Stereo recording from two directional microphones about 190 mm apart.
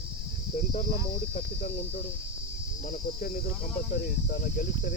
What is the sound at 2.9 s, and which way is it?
Speech, 45° left (ahead or behind).